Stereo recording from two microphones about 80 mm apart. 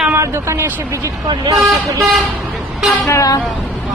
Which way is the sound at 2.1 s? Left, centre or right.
Centre.